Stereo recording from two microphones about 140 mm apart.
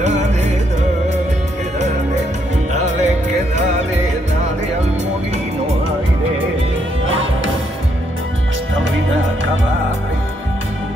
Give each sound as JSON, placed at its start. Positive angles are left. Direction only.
{"t": 0.0, "sound": "music", "side_deg": -55}
{"t": 2.7, "sound": "music", "side_deg": -55}